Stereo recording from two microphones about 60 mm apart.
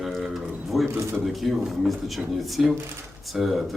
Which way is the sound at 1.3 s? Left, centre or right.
Centre.